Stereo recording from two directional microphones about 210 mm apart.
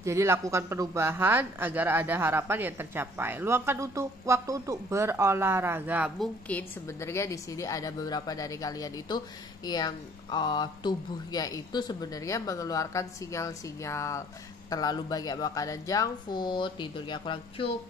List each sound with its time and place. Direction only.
0.0 s a woman's voice: 15° right (ahead or behind); by 17.7 s 25° left (ahead or behind)